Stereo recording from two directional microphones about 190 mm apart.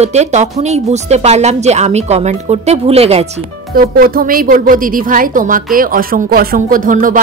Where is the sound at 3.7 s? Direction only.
50° right (ahead or behind).